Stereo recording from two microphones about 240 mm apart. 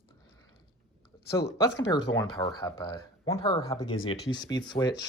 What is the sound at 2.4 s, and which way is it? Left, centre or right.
Speech, centre.